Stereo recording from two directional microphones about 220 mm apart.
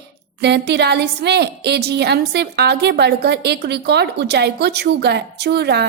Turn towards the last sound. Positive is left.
turn(degrees=-50)  # may be behind; listen again after turning